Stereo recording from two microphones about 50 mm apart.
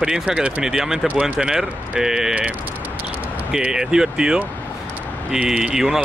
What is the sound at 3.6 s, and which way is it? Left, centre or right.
Speech, centre.